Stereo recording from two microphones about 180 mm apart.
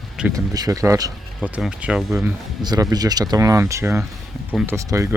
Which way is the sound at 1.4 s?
5° right (ahead or behind).